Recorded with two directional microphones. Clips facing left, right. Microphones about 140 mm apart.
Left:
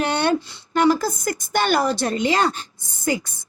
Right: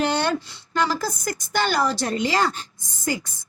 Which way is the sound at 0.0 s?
60° left (ahead or behind).